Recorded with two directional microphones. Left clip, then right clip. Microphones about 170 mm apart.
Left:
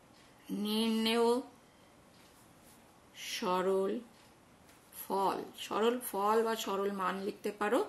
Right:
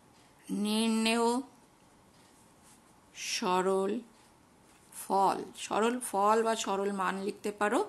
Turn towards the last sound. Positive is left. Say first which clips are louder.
# right 2 dB
turn(degrees=-40)  # may be behind; listen again after turning